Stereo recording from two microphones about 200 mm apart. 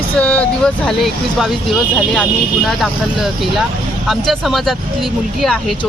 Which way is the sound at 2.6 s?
Centre (ahead or behind).